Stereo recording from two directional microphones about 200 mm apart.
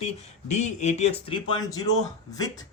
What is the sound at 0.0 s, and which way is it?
A man's voice, 30° left (ahead or behind).